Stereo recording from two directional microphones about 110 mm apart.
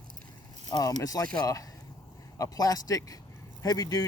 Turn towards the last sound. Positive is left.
turn(degrees=35)  # may be behind; listen again after turning